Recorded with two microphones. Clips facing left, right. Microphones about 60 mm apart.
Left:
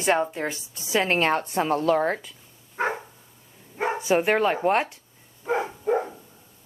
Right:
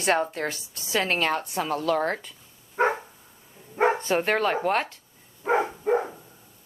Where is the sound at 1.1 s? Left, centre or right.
Left.